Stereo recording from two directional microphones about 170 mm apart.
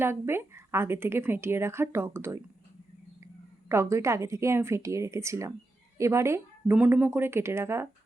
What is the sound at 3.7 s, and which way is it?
Speech, 15° right (ahead or behind).